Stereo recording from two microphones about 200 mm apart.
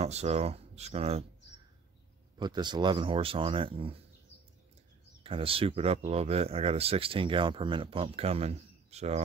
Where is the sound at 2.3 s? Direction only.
20° right (ahead or behind).